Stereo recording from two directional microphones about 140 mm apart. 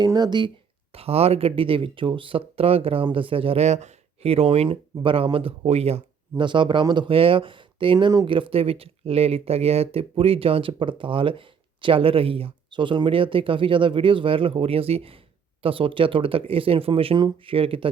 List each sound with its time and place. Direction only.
0.0 s speech: 30° right (ahead or behind)
0.9 s speech: 45° right (ahead or behind)